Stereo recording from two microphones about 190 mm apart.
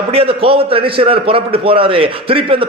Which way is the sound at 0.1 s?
30° right (ahead or behind).